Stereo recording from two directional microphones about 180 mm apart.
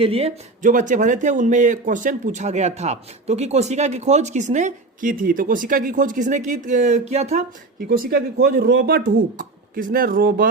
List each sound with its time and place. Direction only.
0.0 s speech: 35° right (ahead or behind)
0.6 s speech: 45° right (ahead or behind)
7.8 s speech: 55° right (ahead or behind)
8.5 s speech: 65° right (ahead or behind)